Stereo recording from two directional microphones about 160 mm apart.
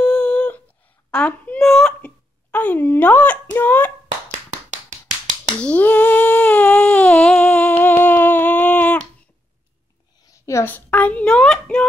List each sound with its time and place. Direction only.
0.0 s humming: 10° left (ahead or behind)
1.1 s hiccup: 10° left (ahead or behind)
4.3 s finger snapping: 50° right (ahead or behind)
5.6 s humming: 10° left (ahead or behind)
10.2 s a child's voice: 20° left (ahead or behind)